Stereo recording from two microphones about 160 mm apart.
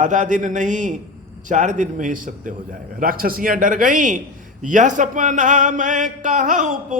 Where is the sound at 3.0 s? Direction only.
65° right (ahead or behind).